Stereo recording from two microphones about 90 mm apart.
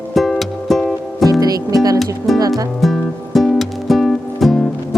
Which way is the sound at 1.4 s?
45° right (ahead or behind).